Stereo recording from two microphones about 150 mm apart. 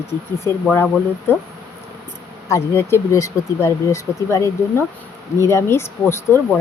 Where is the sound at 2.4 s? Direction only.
20° left (ahead or behind).